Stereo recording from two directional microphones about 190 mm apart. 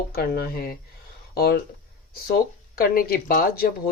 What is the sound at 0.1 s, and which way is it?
Speech, 55° left (ahead or behind).